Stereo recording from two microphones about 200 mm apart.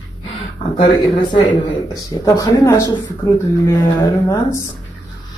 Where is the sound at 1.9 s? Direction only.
15° left (ahead or behind).